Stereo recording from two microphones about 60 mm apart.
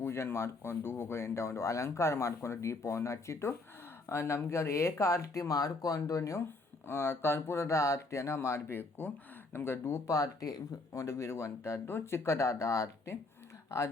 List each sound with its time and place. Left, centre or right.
0.0 s speech: left
6.4 s speech: left